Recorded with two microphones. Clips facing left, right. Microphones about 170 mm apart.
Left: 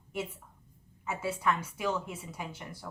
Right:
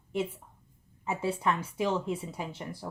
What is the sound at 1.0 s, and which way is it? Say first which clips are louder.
A woman's voice: right 2 dB; 30° right (ahead or behind).